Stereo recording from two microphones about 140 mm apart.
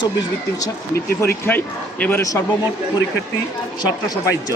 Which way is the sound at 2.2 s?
25° left (ahead or behind).